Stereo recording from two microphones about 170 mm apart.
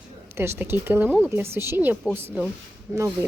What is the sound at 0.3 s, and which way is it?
Speech, 15° right (ahead or behind).